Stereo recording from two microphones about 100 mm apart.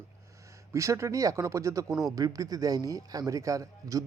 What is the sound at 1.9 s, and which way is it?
Speech, centre (ahead or behind).